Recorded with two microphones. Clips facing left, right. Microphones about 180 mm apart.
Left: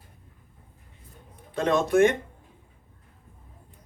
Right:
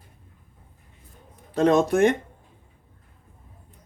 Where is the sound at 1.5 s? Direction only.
40° right (ahead or behind).